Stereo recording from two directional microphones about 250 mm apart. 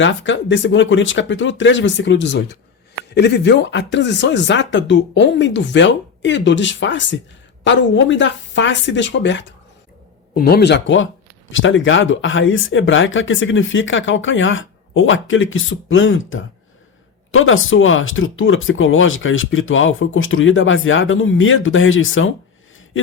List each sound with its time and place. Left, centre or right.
0.0 s speech: left